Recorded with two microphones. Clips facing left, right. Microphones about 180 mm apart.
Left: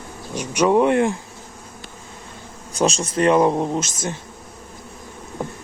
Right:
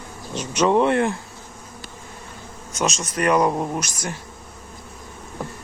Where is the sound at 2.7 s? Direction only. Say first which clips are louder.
Left 5 dB; 30° left (ahead or behind).